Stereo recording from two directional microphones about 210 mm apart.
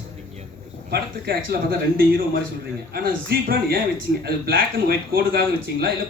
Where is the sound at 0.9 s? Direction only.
45° right (ahead or behind).